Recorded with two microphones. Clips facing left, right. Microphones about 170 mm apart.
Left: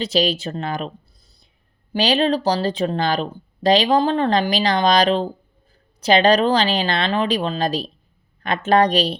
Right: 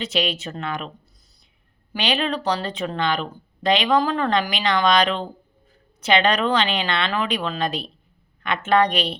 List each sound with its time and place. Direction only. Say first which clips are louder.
0.0 s speech: left 5 dB; 35° left (ahead or behind)
1.9 s speech: left 6 dB; 35° left (ahead or behind)